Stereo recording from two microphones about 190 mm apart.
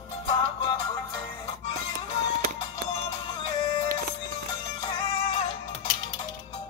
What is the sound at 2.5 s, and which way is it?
Music, 30° left (ahead or behind).